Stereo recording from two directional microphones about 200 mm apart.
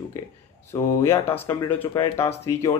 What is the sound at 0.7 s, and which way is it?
Speech, 15° left (ahead or behind).